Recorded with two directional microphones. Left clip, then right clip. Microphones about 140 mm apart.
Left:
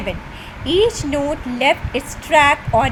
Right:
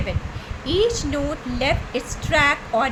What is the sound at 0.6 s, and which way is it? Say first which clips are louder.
A woman's voice: left 4 dB; 25° left (ahead or behind).